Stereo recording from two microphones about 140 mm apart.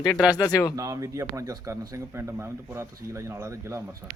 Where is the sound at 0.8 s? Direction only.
25° right (ahead or behind).